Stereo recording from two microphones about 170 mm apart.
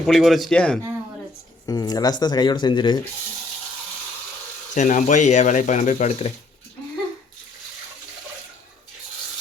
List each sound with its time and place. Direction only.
0.0 s speech: centre (ahead or behind)
1.6 s speech: 20° left (ahead or behind)
4.7 s speech: 45° left (ahead or behind)